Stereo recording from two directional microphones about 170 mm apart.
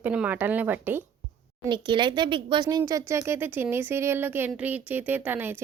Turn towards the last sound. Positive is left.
turn(degrees=-10)  # may be behind; listen again after turning